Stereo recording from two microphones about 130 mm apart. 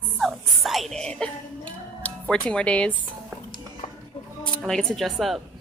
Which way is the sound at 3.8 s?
55° left (ahead or behind).